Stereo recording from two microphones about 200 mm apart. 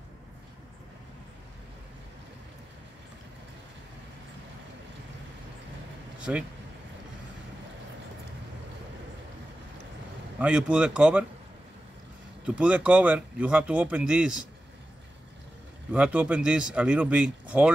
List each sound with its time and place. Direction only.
6.3 s speech: 5° right (ahead or behind)
10.4 s speech: 5° right (ahead or behind)
12.4 s speech: 5° right (ahead or behind)
15.9 s speech: 5° right (ahead or behind)